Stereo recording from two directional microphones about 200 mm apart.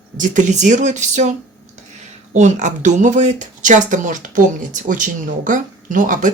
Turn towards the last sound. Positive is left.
turn(degrees=-40)  # may be behind; listen again after turning